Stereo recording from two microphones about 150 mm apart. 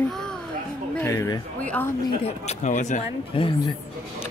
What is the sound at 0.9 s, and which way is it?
Speech, 20° left (ahead or behind).